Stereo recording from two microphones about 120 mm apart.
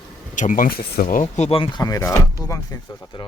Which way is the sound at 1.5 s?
45° left (ahead or behind).